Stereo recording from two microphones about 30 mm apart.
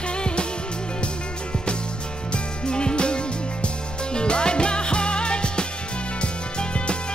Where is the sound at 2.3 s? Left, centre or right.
Left.